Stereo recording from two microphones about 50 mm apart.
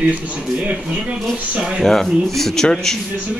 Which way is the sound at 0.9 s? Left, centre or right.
Centre.